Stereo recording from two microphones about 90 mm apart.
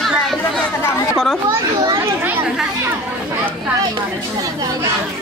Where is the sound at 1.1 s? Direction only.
Centre (ahead or behind).